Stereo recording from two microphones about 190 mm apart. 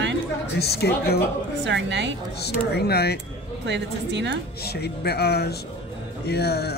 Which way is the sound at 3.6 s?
65° right (ahead or behind).